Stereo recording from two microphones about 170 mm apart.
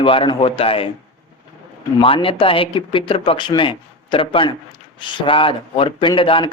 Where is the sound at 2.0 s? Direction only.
30° left (ahead or behind).